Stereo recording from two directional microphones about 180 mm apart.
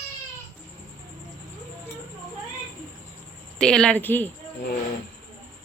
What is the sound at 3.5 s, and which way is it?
Speech, 5° left (ahead or behind).